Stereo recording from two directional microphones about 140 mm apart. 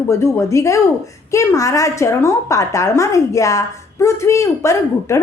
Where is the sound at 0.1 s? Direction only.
20° left (ahead or behind).